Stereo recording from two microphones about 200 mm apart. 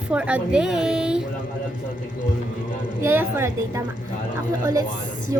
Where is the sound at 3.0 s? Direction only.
10° right (ahead or behind).